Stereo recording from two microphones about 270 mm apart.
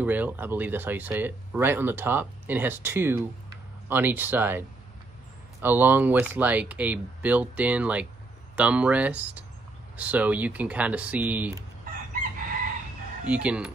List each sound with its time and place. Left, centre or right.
0.0 s speech: centre
11.8 s chicken: right
13.2 s speech: centre